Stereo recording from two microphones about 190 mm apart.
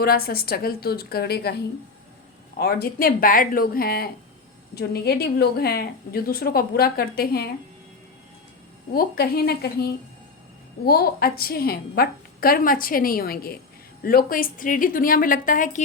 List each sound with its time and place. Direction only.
0.0 s a woman's voice: 55° left (ahead or behind)
8.9 s a woman's voice: 50° left (ahead or behind)